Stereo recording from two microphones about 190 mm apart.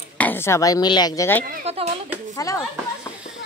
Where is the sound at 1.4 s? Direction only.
35° right (ahead or behind).